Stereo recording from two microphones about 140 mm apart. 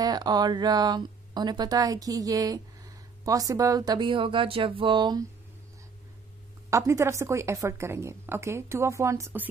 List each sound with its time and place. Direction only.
0.0 s speech: 30° right (ahead or behind)
6.7 s speech: 20° right (ahead or behind)